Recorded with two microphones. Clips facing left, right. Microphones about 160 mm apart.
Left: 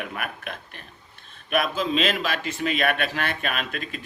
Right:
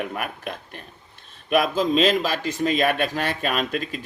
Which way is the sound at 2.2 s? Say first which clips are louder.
Right 4 dB; 40° right (ahead or behind).